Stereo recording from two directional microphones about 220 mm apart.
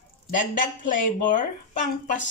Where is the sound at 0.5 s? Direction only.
35° left (ahead or behind).